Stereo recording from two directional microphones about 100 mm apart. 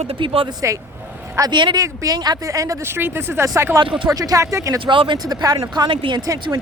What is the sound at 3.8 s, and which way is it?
Speech, 55° right (ahead or behind).